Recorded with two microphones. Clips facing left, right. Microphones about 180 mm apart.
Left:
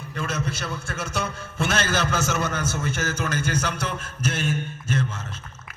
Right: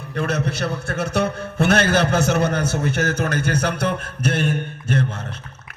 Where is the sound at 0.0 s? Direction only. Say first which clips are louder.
Right 6 dB; 60° right (ahead or behind).